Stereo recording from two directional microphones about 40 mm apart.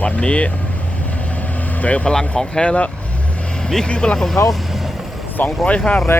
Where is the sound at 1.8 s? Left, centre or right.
Left.